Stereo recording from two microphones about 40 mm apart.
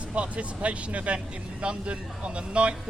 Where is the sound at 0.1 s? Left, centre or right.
Right.